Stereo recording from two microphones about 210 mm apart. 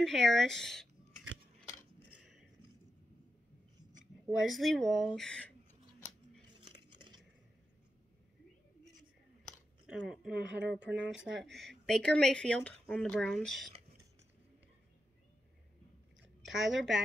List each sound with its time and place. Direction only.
0.0 s speech: centre (ahead or behind)
2.0 s a sound: 5° right (ahead or behind)
4.5 s speech: centre (ahead or behind)
9.4 s a sound: centre (ahead or behind)
10.8 s speech: 55° right (ahead or behind)
11.3 s speech: centre (ahead or behind)
16.2 s chewing: centre (ahead or behind)